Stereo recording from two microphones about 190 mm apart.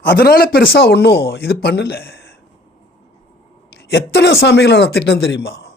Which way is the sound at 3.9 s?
65° left (ahead or behind).